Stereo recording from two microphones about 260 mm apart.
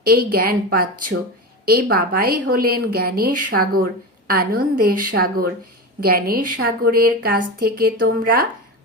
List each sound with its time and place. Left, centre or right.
0.0 s a woman's voice: right